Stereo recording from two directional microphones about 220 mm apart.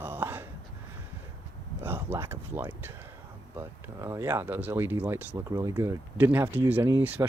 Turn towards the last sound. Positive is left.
turn(degrees=-10)  # may be behind; listen again after turning